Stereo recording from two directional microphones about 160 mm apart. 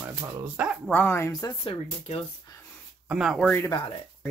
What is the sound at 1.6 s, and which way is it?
Speech, 35° left (ahead or behind).